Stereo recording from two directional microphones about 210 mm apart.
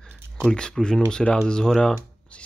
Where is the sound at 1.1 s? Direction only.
5° left (ahead or behind).